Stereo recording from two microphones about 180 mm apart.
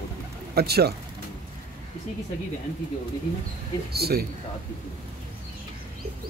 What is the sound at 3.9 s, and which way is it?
Speech, 60° right (ahead or behind).